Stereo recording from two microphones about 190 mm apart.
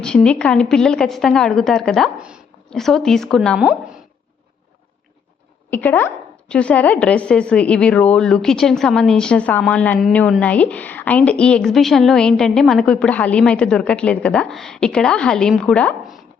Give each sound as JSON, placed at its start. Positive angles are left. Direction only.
{"t": 0.0, "sound": "a woman's voice", "side_deg": 5}
{"t": 5.7, "sound": "a woman's voice", "side_deg": 10}